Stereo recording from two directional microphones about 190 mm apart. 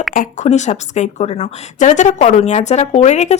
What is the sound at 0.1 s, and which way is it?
A woman's voice, 40° left (ahead or behind).